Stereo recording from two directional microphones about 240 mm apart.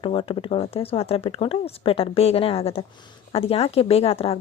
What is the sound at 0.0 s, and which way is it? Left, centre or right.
Speech, left.